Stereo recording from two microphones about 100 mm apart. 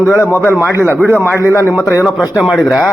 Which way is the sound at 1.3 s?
30° left (ahead or behind).